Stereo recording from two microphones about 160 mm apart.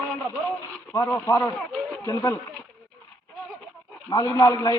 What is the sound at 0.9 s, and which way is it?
Speech, 15° left (ahead or behind).